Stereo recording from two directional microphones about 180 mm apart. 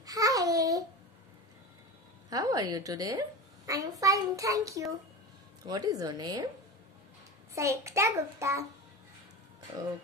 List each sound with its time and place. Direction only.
0.0 s babbling: 20° right (ahead or behind)
2.2 s a woman's voice: 20° right (ahead or behind)
7.5 s a child's voice: 15° right (ahead or behind)